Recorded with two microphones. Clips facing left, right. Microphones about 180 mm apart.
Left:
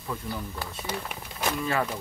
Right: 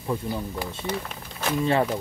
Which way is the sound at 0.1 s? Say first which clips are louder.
Right 6 dB; 25° right (ahead or behind).